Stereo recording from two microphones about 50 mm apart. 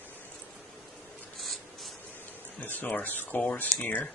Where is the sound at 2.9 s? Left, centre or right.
Left.